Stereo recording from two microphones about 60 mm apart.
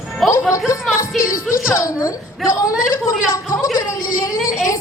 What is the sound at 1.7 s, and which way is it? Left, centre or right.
A woman's voice, left.